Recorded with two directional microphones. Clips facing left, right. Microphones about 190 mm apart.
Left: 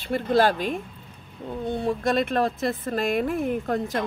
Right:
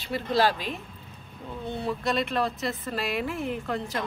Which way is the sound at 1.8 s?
50° left (ahead or behind).